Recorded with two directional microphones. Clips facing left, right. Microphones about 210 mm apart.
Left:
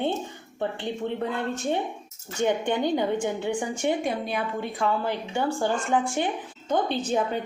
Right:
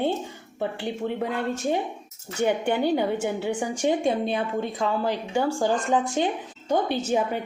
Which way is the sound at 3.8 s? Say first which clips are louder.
Right 5 dB; 25° right (ahead or behind).